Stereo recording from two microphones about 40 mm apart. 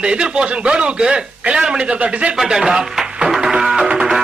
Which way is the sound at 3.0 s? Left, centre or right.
Right.